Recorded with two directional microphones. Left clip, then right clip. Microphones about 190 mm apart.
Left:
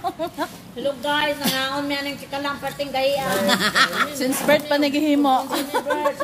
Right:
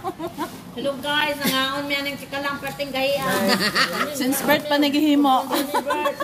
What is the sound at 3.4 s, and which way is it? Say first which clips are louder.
Speech: left 5 dB; 35° left (ahead or behind).